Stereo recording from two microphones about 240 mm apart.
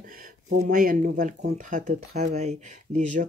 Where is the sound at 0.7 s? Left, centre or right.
Right.